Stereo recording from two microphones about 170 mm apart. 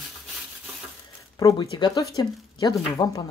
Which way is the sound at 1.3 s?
20° left (ahead or behind).